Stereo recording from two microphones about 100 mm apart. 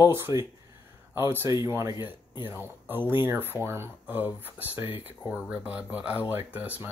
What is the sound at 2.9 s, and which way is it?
Speech, 20° right (ahead or behind).